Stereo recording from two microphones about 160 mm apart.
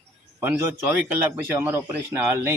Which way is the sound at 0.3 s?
10° right (ahead or behind).